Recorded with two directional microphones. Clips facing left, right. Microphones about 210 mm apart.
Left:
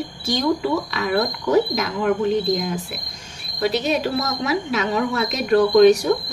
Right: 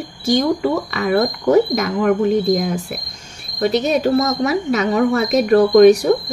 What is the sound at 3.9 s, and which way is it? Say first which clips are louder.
Speech: right 6 dB; 45° right (ahead or behind).